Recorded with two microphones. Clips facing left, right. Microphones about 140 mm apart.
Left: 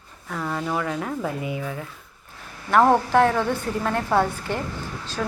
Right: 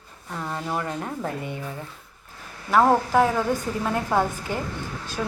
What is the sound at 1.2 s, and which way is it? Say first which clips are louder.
Speech: left 3 dB; 5° left (ahead or behind).